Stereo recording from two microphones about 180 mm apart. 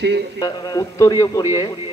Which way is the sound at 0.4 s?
20° left (ahead or behind).